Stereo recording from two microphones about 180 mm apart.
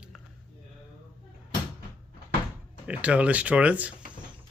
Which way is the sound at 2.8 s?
5° right (ahead or behind).